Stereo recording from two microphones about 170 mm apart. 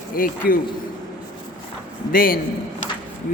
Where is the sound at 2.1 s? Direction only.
60° left (ahead or behind).